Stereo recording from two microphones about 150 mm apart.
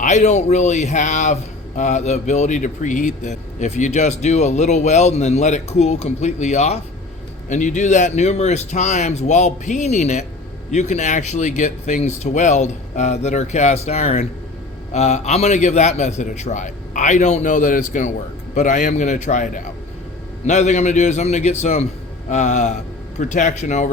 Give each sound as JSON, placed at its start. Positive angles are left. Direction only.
{"t": 0.0, "sound": "a man's voice", "side_deg": 50}